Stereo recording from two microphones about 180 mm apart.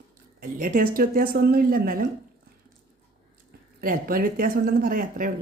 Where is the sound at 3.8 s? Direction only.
55° right (ahead or behind).